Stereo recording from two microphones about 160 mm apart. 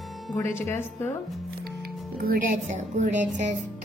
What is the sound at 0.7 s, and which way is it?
Speech, 15° left (ahead or behind).